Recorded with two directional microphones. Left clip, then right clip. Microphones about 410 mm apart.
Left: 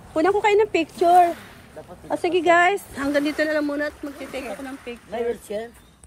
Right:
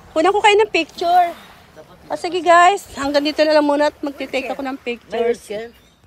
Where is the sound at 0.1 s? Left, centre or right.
Centre.